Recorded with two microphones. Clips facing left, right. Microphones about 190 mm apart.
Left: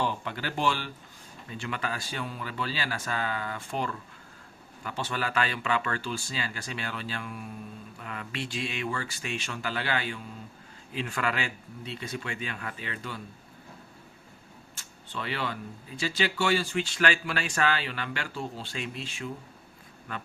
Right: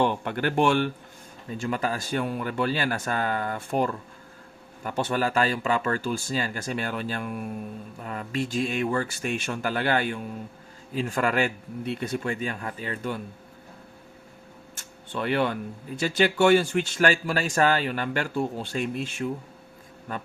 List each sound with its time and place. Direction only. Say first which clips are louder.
0.0 s speech: right 7 dB; 55° right (ahead or behind)
1.5 s speech: right 6 dB; 40° right (ahead or behind)
8.0 s speech: right 7 dB; 40° right (ahead or behind)
14.8 s speech: right 7 dB; 55° right (ahead or behind)